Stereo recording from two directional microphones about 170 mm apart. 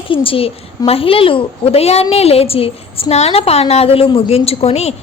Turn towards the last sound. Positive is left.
turn(degrees=40)  # may be behind; listen again after turning